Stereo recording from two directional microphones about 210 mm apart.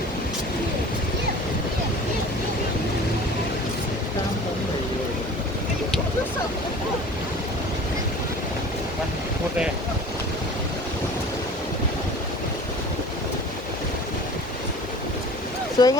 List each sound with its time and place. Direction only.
15.8 s speech: 20° left (ahead or behind)